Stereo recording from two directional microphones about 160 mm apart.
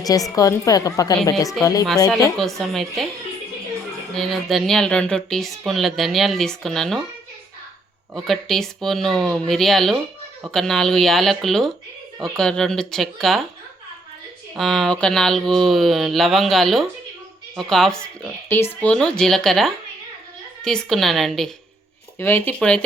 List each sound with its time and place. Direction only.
0.0 s a woman's voice: 20° left (ahead or behind)
2.4 s speech: centre (ahead or behind)
4.1 s speech: centre (ahead or behind)
8.1 s speech: centre (ahead or behind)
14.5 s speech: centre (ahead or behind)
18.4 s speech: 15° left (ahead or behind)
22.2 s speech: 15° left (ahead or behind)